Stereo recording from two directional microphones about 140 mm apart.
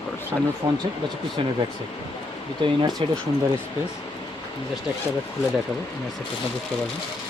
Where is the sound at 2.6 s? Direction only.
35° right (ahead or behind).